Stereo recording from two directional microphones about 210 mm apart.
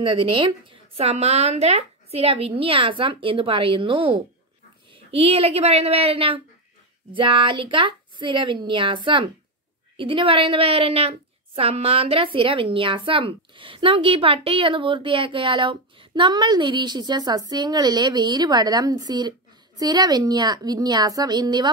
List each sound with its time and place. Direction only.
0.0 s a woman's voice: 25° right (ahead or behind)